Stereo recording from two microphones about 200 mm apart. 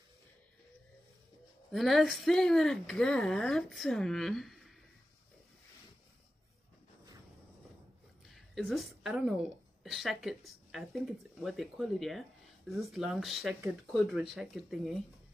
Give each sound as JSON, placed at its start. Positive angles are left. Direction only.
{"t": 1.7, "sound": "speech", "side_deg": 0}
{"t": 8.3, "sound": "a woman's voice", "side_deg": 0}